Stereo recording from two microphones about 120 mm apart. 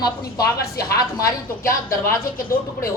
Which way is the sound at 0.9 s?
35° left (ahead or behind).